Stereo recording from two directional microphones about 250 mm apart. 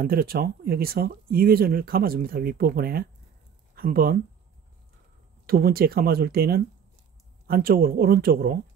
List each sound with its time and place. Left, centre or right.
0.0 s speech: right
5.5 s speech: right